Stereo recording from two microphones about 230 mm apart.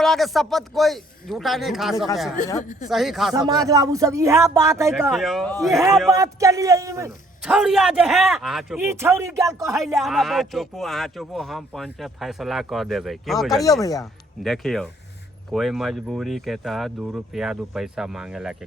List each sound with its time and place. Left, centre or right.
0.0 s a man's voice: centre
2.6 s speech: left
2.9 s a man's voice: centre
3.3 s speech: centre
4.9 s a man's voice: centre
6.1 s speech: centre
7.4 s a man's voice: centre
9.6 s a man's voice: centre